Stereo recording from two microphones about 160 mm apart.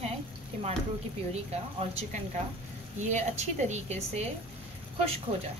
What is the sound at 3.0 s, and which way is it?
A woman's voice, 45° right (ahead or behind).